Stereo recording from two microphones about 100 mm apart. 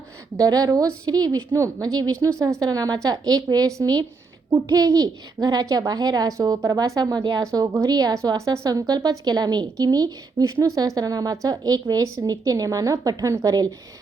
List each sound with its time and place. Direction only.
0.3 s a woman's voice: 40° right (ahead or behind)